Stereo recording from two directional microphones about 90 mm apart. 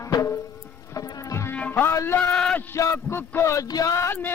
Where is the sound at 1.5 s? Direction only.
15° left (ahead or behind).